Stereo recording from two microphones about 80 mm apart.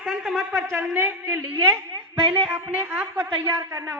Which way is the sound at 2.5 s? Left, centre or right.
Right.